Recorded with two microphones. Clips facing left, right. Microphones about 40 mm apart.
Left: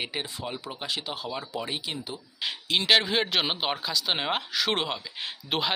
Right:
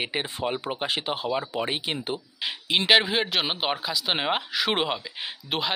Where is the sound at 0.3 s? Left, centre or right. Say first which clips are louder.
Right 7 dB; right.